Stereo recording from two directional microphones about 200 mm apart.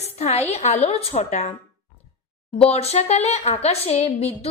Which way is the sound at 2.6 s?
30° left (ahead or behind).